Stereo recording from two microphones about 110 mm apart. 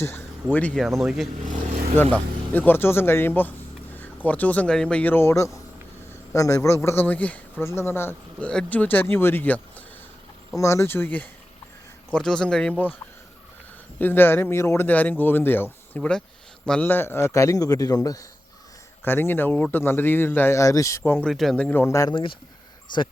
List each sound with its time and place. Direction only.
0.0 s speech: 20° left (ahead or behind)
0.8 s speech: centre (ahead or behind)
2.1 s speech: 15° left (ahead or behind)
7.6 s speech: 25° left (ahead or behind)
10.5 s speech: 25° left (ahead or behind); by 12.7 s 5° left (ahead or behind)
14.0 s speech: 20° left (ahead or behind)
16.8 s speech: 20° left (ahead or behind)
19.0 s speech: 20° left (ahead or behind)
21.2 s speech: centre (ahead or behind)
21.5 s speech: 15° left (ahead or behind)